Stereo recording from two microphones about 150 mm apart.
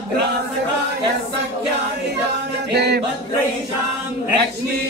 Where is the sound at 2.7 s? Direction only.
90° right.